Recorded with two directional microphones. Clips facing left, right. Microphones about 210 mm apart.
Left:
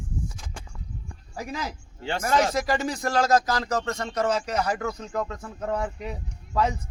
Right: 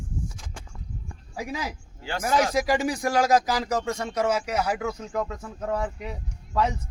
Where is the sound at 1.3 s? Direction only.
10° right (ahead or behind).